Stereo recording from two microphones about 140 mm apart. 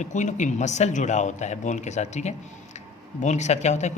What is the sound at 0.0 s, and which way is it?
A man's voice, 60° left (ahead or behind).